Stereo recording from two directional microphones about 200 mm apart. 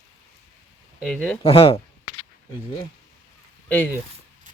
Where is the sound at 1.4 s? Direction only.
30° left (ahead or behind).